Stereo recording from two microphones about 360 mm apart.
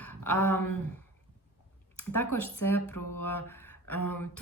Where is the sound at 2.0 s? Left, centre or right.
Centre.